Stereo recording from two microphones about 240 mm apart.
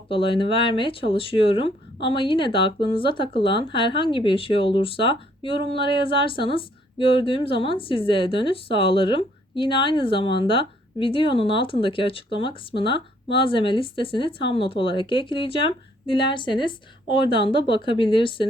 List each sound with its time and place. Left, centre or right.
0.1 s speech: left